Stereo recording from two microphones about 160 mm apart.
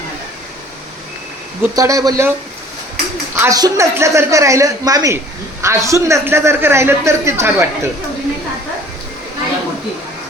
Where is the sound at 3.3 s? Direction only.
20° right (ahead or behind).